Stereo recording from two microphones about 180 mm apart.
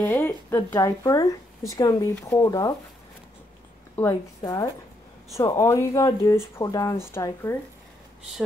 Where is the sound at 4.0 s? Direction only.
15° left (ahead or behind).